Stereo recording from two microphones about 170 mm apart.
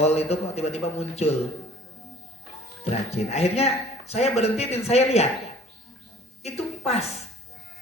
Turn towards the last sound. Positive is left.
turn(degrees=40)  # may be behind; listen again after turning